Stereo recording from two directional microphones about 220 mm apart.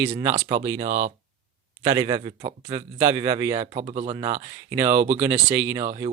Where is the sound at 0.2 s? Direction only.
20° right (ahead or behind).